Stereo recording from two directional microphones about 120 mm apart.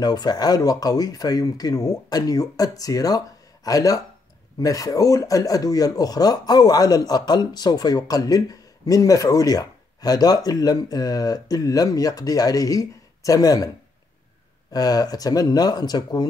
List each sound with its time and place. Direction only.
0.0 s speech: 35° left (ahead or behind)
14.7 s speech: 35° left (ahead or behind)